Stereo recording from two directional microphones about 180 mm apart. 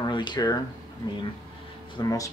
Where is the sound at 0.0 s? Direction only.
25° left (ahead or behind).